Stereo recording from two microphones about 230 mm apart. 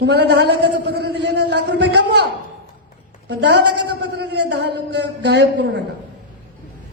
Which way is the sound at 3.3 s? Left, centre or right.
Right.